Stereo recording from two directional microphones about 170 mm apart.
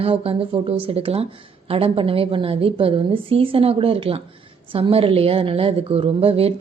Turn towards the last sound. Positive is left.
turn(degrees=-35)  # may be behind; listen again after turning